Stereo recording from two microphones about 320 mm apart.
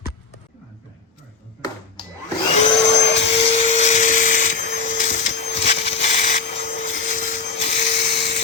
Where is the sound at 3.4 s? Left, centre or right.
Centre.